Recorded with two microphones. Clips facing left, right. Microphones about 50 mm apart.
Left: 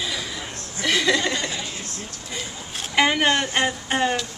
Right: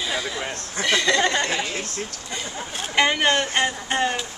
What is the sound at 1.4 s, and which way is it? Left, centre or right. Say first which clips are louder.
Speech: right 5 dB; right.